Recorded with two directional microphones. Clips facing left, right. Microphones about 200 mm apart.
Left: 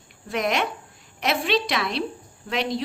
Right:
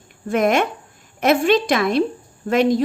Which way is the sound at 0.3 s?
50° right (ahead or behind).